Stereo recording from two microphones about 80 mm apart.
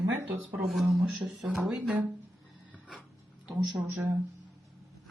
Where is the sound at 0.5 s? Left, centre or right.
Centre.